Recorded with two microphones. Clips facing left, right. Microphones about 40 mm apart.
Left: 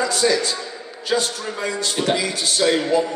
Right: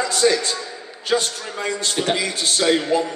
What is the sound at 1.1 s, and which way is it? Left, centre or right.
A man's voice, centre.